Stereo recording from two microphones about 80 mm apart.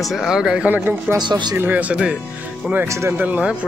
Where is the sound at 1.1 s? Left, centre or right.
Right.